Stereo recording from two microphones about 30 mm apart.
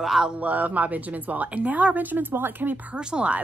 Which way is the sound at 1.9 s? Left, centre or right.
Right.